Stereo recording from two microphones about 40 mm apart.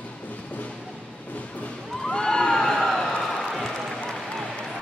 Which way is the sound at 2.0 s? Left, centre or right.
Centre.